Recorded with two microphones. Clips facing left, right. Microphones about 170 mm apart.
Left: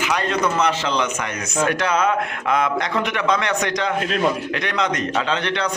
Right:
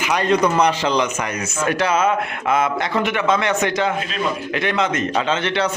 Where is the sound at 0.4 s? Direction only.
10° right (ahead or behind).